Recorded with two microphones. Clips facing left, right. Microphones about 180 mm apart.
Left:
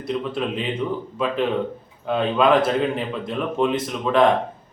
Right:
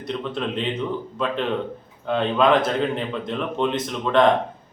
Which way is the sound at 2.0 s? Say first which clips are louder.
Left 1 dB; 5° left (ahead or behind).